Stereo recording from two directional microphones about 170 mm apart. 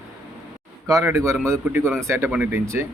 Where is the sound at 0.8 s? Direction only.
20° right (ahead or behind).